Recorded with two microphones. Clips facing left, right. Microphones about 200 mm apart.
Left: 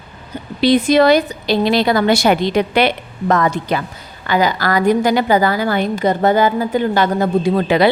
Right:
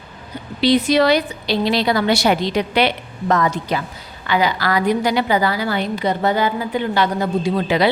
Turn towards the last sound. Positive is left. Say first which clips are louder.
# left 4 dB
turn(degrees=55)  # may be behind; listen again after turning